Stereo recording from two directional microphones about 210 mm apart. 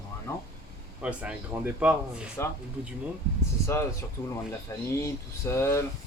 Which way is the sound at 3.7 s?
15° left (ahead or behind).